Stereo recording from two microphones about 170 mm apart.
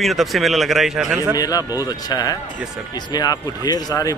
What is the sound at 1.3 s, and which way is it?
Speech, 20° left (ahead or behind).